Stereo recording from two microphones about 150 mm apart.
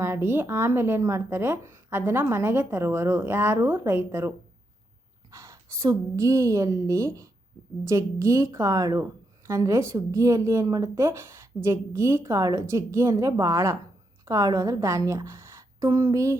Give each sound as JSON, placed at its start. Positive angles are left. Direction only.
{"t": 0.0, "sound": "a woman's voice", "side_deg": -15}